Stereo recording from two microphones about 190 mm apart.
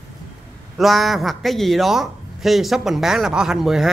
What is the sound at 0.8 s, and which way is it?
Speech, centre (ahead or behind).